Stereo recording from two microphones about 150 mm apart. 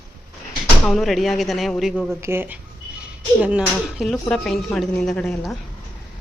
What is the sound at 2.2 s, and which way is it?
Speech, 15° right (ahead or behind).